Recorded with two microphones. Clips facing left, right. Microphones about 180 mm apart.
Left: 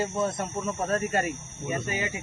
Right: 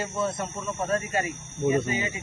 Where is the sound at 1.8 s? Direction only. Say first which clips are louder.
Right 2 dB; 65° left (ahead or behind).